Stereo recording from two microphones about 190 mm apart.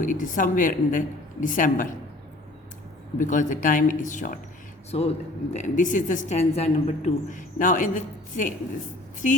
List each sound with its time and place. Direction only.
0.0 s a woman's voice: 45° left (ahead or behind)
3.2 s a woman's voice: 40° left (ahead or behind)